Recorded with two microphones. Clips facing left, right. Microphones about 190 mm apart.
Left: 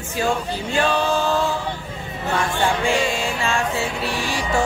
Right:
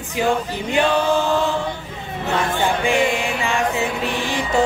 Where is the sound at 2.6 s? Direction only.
15° right (ahead or behind).